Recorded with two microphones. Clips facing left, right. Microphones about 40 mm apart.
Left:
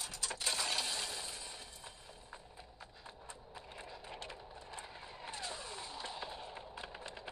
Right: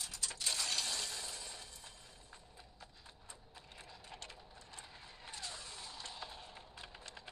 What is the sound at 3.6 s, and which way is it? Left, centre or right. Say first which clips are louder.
Vehicle: left 6 dB; centre.